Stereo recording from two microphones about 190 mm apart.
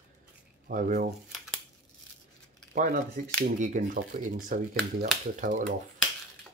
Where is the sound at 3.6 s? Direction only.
40° right (ahead or behind).